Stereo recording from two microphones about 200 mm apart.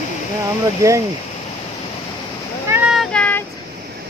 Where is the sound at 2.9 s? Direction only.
5° left (ahead or behind).